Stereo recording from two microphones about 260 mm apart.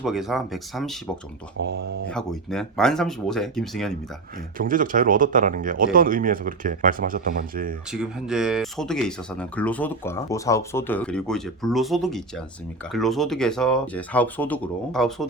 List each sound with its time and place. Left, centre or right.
0.0 s speech: centre
1.6 s speech: right
2.0 s speech: centre
4.5 s speech: right
7.9 s speech: centre